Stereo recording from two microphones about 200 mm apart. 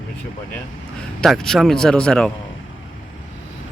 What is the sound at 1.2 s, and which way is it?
Speech, centre (ahead or behind).